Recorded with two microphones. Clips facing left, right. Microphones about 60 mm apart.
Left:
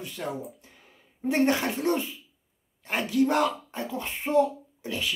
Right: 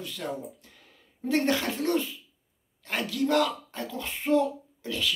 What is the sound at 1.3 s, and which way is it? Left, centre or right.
A child's voice, left.